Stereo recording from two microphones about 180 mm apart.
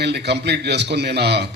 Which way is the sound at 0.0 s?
65° right (ahead or behind).